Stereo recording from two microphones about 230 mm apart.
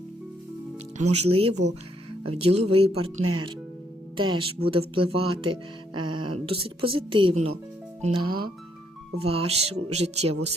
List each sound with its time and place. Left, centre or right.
0.9 s speech: right
3.2 s speech: right
4.2 s speech: right